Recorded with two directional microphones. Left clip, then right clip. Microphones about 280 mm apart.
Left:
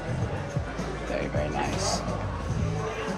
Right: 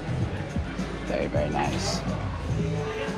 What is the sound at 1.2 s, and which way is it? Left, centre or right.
Speech, centre.